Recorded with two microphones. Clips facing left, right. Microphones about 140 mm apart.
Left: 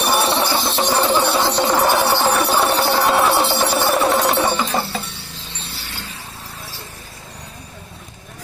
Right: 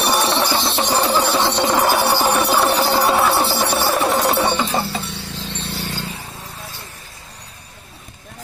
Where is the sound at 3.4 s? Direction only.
20° left (ahead or behind).